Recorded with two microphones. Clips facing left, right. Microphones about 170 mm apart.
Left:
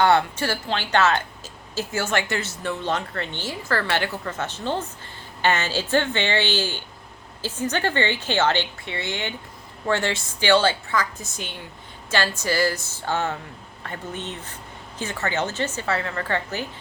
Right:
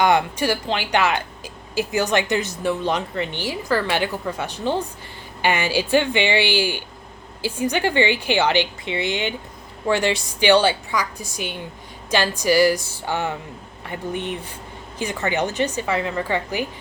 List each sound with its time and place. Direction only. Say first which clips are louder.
0.0 s speech: right 1 dB; 15° right (ahead or behind)